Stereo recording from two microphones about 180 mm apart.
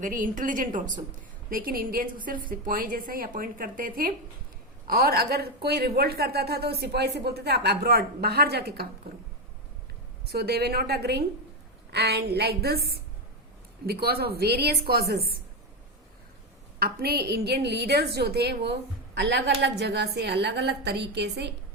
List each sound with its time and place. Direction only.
0.0 s a woman's voice: 45° right (ahead or behind); by 8.9 s 65° right (ahead or behind)
10.2 s speech: 65° right (ahead or behind)
16.8 s a woman's voice: 60° right (ahead or behind)